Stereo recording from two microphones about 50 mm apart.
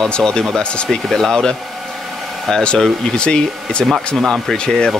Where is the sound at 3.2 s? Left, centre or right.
Centre.